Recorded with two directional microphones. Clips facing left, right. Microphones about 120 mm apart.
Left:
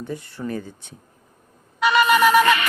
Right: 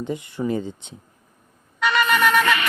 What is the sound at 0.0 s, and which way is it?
Speech, 20° right (ahead or behind).